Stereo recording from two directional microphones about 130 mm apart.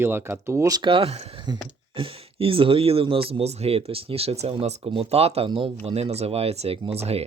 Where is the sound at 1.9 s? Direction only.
45° right (ahead or behind).